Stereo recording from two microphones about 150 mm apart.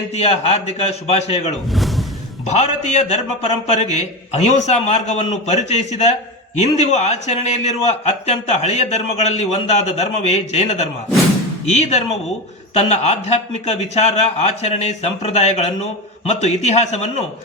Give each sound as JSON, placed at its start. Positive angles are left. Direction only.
{"t": 0.1, "sound": "a man's voice", "side_deg": 45}
{"t": 1.7, "sound": "speech", "side_deg": 0}
{"t": 2.5, "sound": "a man's voice", "side_deg": 50}